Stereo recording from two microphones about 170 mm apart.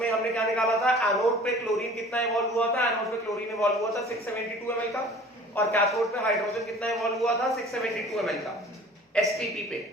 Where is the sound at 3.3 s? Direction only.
20° left (ahead or behind).